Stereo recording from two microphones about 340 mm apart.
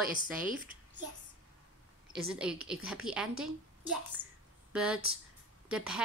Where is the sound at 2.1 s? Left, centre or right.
Centre.